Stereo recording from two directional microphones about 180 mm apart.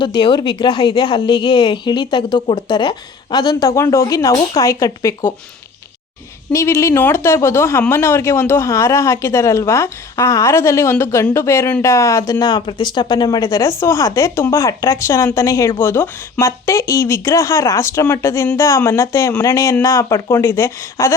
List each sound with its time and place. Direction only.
0.0 s a woman's voice: 25° left (ahead or behind)
6.5 s a woman's voice: 15° left (ahead or behind)